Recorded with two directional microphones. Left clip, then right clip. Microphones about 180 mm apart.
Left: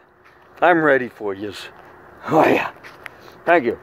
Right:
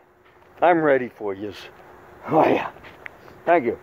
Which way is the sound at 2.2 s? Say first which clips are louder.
Left 3 dB; 5° left (ahead or behind).